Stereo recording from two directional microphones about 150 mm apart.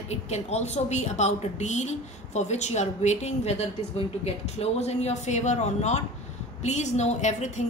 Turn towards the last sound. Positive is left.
turn(degrees=50)  # may be behind; listen again after turning